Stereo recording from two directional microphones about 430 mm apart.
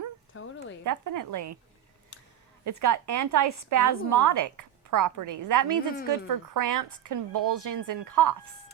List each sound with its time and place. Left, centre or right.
0.3 s speech: left
0.9 s a woman's voice: right
2.6 s a woman's voice: right